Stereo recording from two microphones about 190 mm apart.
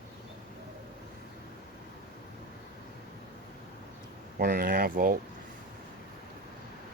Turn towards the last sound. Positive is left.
turn(degrees=-50)  # may be behind; listen again after turning